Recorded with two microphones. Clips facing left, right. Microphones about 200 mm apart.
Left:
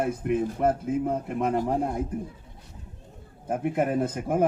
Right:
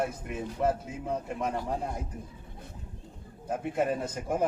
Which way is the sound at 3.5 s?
55° left (ahead or behind).